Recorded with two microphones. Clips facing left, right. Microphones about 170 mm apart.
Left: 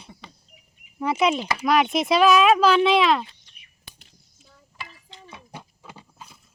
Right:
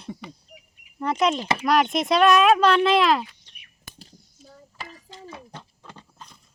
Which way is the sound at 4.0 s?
40° right (ahead or behind).